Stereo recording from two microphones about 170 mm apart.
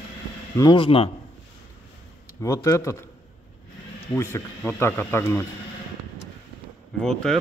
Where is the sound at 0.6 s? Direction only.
30° left (ahead or behind).